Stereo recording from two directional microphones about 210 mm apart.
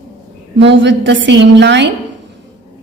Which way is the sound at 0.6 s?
55° right (ahead or behind).